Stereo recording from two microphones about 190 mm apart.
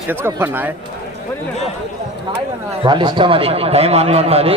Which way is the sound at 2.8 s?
25° right (ahead or behind).